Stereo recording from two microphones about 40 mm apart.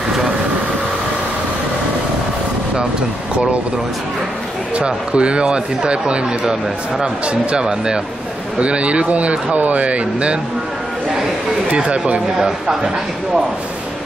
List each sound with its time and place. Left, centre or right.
4.7 s speech: right
11.7 s speech: right
12.4 s speech: centre